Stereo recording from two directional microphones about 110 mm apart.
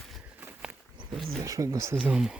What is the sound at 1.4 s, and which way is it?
Speech, 30° right (ahead or behind).